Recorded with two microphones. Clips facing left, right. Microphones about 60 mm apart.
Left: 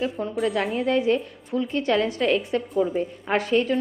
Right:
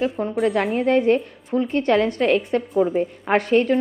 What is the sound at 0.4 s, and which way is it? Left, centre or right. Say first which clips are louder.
A woman's voice: right 4 dB; right.